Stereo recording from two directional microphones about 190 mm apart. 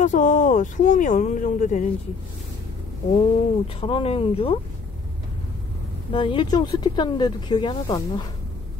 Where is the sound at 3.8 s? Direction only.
30° left (ahead or behind).